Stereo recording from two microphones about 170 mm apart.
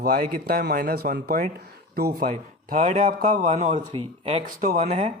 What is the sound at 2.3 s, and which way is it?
Speech, 45° right (ahead or behind).